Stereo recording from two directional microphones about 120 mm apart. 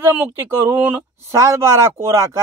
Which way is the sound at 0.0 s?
15° right (ahead or behind).